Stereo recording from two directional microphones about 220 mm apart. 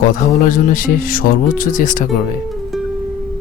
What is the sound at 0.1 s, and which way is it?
Speech, 40° left (ahead or behind).